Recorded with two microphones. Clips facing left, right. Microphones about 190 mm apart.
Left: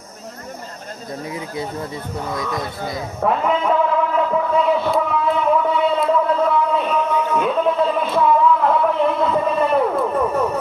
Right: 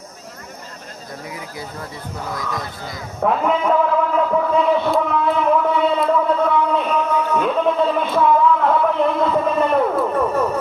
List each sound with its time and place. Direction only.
1.3 s speech: 25° left (ahead or behind)
3.2 s a man's voice: centre (ahead or behind)
4.2 s a sound: centre (ahead or behind)